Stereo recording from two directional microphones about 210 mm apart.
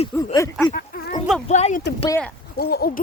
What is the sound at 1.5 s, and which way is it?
Speech, 35° left (ahead or behind).